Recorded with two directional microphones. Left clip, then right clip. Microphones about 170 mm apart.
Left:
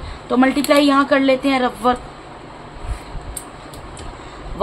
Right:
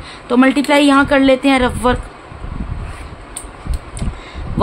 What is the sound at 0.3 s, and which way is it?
A woman's voice, 35° right (ahead or behind).